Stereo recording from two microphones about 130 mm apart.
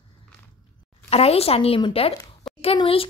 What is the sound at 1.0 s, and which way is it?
A woman's voice, 50° left (ahead or behind).